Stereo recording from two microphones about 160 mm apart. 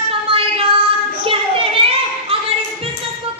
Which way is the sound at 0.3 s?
35° right (ahead or behind).